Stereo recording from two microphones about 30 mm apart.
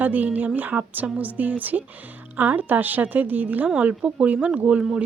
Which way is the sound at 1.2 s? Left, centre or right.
Right.